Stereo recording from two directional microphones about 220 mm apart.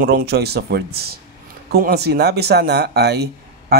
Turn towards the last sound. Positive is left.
turn(degrees=-45)  # may be behind; listen again after turning